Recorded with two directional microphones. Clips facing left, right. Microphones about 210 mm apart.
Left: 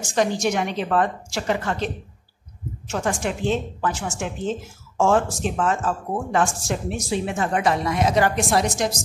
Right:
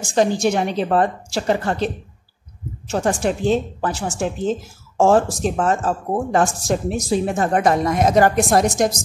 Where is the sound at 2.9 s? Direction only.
35° right (ahead or behind).